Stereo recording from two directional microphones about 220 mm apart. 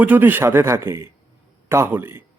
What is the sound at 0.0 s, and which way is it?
A man's voice, 10° right (ahead or behind).